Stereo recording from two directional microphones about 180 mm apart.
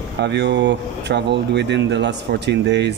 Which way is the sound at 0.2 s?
70° right (ahead or behind).